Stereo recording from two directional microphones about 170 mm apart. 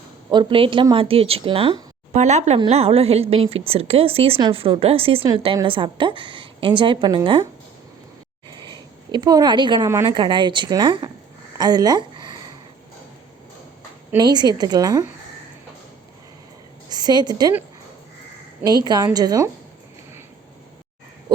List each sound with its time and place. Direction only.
0.3 s a woman's voice: 30° right (ahead or behind)
2.2 s a woman's voice: 40° right (ahead or behind)
8.6 s a woman's voice: 25° right (ahead or behind)
11.5 s a sound: 25° right (ahead or behind)
14.2 s a woman's voice: 25° right (ahead or behind)
16.9 s a woman's voice: 25° right (ahead or behind)
18.6 s a woman's voice: 25° right (ahead or behind)